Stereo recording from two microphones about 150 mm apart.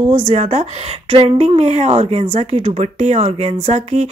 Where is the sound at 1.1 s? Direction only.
40° right (ahead or behind).